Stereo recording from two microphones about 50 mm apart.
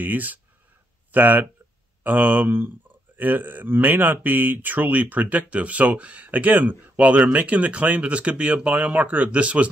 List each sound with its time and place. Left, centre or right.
0.0 s speech: right